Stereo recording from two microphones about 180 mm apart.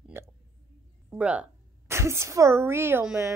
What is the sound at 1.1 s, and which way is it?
A woman's voice, 5° right (ahead or behind).